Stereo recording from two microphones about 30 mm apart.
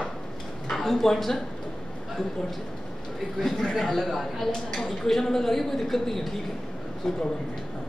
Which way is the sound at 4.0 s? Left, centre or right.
Centre.